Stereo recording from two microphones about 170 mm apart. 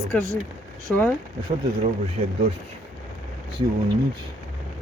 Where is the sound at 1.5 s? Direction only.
35° right (ahead or behind).